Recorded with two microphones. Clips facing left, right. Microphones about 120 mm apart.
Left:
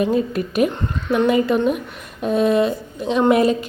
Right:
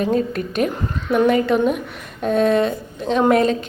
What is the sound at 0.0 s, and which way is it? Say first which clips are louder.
A woman's voice: left 1 dB; 5° left (ahead or behind).